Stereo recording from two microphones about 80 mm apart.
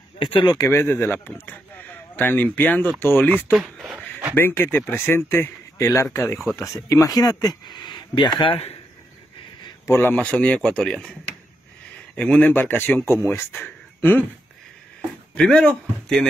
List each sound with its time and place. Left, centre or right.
0.2 s speech: left
0.7 s speech: left
3.5 s speech: centre
4.4 s speech: left
9.8 s speech: left
10.1 s speech: centre
12.2 s speech: centre
15.3 s speech: centre